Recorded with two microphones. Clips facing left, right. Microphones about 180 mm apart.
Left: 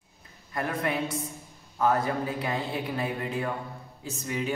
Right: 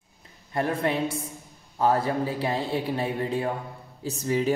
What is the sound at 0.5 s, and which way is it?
A man's voice, 30° right (ahead or behind).